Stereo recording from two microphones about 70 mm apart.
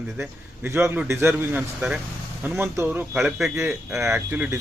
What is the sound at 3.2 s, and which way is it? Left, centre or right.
Speech, centre.